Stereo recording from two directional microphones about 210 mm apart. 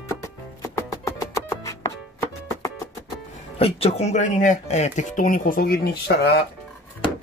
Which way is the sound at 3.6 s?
30° left (ahead or behind).